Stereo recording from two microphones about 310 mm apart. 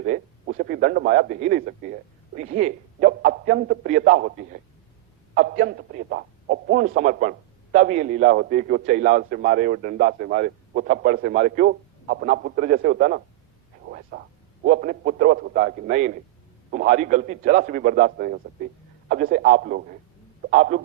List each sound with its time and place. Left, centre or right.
0.0 s a man's voice: right
14.1 s a sound: right
14.6 s a man's voice: right